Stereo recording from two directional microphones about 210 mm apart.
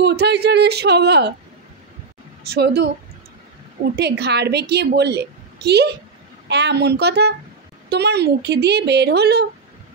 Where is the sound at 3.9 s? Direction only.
50° right (ahead or behind).